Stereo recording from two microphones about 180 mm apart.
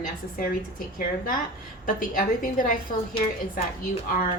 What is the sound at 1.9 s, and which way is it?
Speech, 50° left (ahead or behind).